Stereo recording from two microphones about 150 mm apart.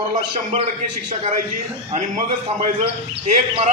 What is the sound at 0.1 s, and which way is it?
Speech, 45° right (ahead or behind).